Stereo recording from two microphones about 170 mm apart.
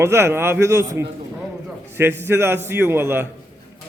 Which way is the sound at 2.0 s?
15° right (ahead or behind).